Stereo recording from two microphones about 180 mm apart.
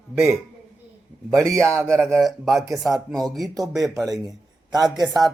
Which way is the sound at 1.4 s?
5° left (ahead or behind).